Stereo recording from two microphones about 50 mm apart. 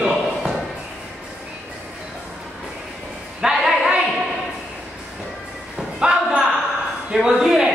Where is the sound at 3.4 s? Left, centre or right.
Centre.